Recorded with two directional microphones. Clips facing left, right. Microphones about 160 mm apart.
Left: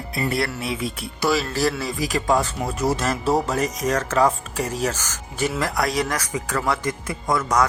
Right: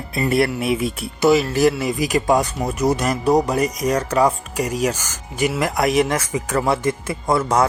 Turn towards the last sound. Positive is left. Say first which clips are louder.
# right 3 dB
turn(degrees=-30)  # may be behind; listen again after turning